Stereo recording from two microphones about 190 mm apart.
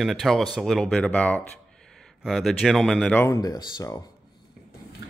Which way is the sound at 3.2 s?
20° left (ahead or behind).